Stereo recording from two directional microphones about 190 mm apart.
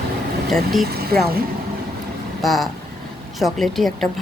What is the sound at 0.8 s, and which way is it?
Speech, 55° right (ahead or behind).